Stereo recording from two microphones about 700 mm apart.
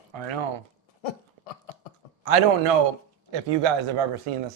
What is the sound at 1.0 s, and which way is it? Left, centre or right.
Dog, left.